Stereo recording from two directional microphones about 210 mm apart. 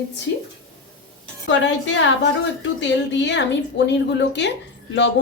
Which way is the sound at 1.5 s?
60° left (ahead or behind).